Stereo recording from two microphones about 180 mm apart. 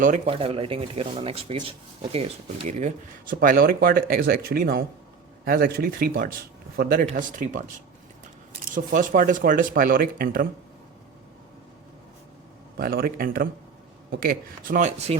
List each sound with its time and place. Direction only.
0.3 s speech: 30° right (ahead or behind); by 7.6 s 45° right (ahead or behind)
8.7 s speech: 50° right (ahead or behind)
12.7 s speech: 55° right (ahead or behind); by 15.2 s 35° right (ahead or behind)